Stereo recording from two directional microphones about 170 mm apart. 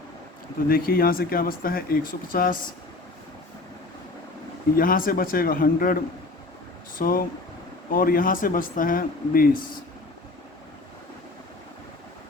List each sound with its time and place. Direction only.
0.7 s speech: 60° left (ahead or behind)
4.8 s speech: 55° left (ahead or behind)
7.0 s speech: 55° left (ahead or behind)